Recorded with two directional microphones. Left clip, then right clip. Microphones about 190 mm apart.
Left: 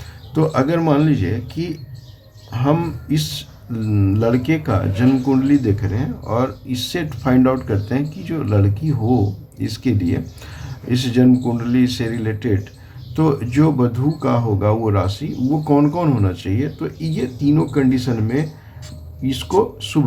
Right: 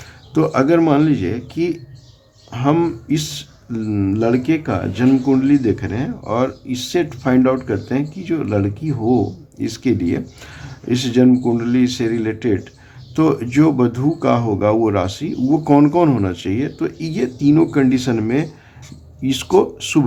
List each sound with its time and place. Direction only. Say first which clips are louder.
0.3 s speech: right 3 dB; 30° right (ahead or behind)